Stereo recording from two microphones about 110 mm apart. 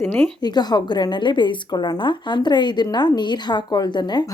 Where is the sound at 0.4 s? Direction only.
40° left (ahead or behind).